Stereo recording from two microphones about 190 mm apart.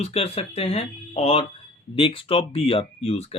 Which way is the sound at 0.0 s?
35° left (ahead or behind).